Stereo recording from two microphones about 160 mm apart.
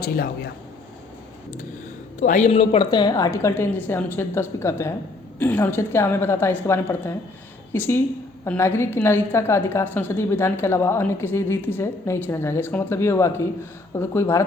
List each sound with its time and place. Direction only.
0.0 s a man's voice: 70° left (ahead or behind)
2.2 s speech: 50° left (ahead or behind)
2.9 s a woman's voice: 25° left (ahead or behind)